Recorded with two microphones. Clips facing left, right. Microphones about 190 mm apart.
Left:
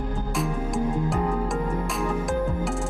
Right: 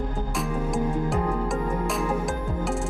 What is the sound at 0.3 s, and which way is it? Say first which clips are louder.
Music: even; centre (ahead or behind).